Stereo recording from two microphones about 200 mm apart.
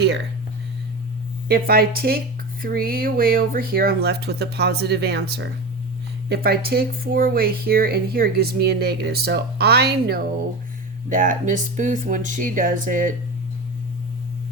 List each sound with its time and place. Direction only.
1.5 s speech: 45° right (ahead or behind)
11.1 s speech: 40° right (ahead or behind)